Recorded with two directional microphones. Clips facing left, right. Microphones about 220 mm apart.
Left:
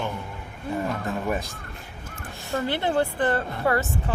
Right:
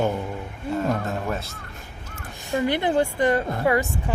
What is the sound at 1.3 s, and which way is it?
Speech, 15° left (ahead or behind).